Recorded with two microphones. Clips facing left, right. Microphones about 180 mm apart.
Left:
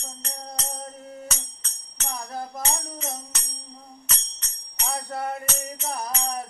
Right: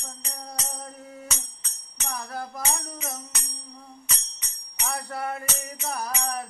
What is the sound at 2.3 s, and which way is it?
Music, 20° left (ahead or behind).